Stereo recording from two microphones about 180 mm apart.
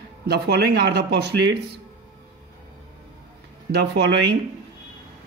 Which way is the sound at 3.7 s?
65° right (ahead or behind).